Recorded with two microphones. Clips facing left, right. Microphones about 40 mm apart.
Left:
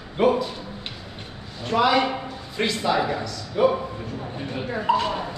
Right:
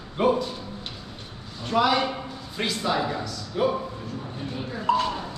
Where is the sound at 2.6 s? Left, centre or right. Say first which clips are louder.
Left 3 dB; centre.